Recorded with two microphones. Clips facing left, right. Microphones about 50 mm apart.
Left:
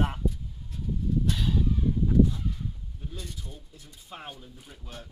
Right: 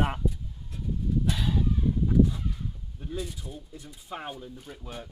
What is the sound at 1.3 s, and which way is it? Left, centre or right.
Chicken, centre.